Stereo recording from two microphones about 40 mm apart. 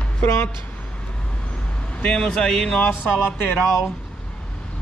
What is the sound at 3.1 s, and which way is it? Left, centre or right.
Music, left.